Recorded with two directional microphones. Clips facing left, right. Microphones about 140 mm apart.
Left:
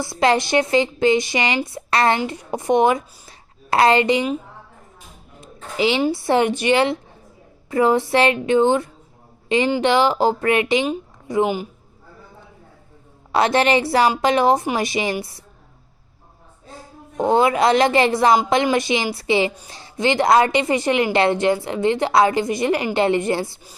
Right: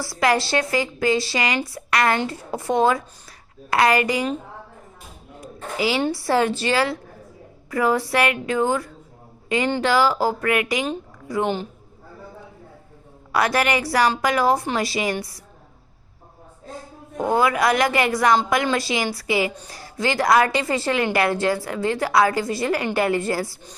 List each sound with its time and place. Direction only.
0.0 s a woman's voice: 25° left (ahead or behind)
5.4 s a sound: 25° left (ahead or behind)
6.1 s a woman's voice: 20° left (ahead or behind)
11.4 s a man's voice: 10° left (ahead or behind)
13.3 s a woman's voice: 25° left (ahead or behind)
17.2 s a woman's voice: 25° left (ahead or behind)